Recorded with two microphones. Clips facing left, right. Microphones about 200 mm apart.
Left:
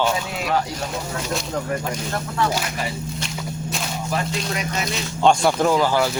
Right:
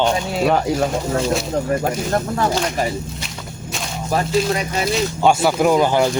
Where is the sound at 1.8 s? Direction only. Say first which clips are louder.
Right 7 dB; 45° right (ahead or behind).